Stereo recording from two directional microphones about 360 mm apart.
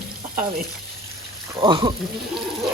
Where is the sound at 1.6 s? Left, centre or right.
Centre.